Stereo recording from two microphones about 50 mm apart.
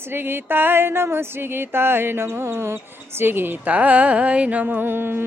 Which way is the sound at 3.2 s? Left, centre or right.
Right.